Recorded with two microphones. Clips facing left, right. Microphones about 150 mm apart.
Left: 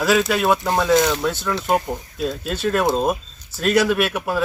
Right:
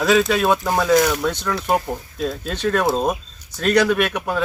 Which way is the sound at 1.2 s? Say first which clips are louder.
Even; 5° left (ahead or behind).